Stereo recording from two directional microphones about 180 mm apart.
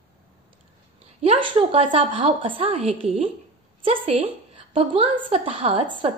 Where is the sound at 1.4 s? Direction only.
30° right (ahead or behind).